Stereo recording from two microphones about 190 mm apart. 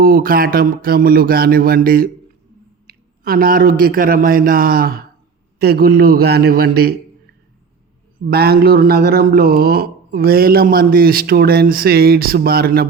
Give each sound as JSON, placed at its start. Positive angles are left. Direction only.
{"t": 0.0, "sound": "speech", "side_deg": -50}
{"t": 8.3, "sound": "speech", "side_deg": -55}